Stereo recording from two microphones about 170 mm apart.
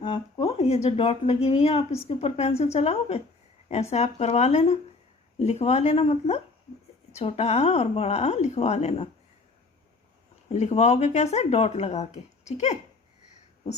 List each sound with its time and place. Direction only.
0.0 s speech: 25° left (ahead or behind)
10.5 s speech: 40° left (ahead or behind)